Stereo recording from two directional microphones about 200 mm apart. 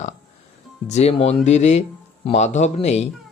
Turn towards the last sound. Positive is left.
turn(degrees=35)  # may be behind; listen again after turning